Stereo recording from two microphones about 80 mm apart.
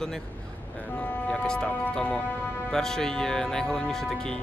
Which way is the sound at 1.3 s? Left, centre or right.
Centre.